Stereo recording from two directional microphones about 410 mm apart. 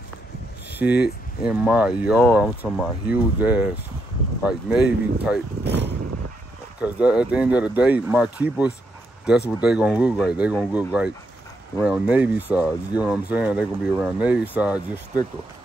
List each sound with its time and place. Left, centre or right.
0.7 s speech: centre
5.6 s vehicle: right
6.8 s speech: centre